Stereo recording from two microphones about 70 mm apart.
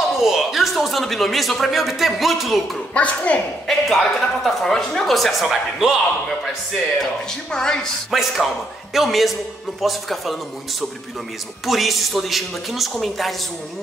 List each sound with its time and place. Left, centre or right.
0.2 s speech: centre
2.9 s speech: centre
3.6 s speech: centre
7.5 s speech: centre
8.1 s speech: centre
11.6 s speech: centre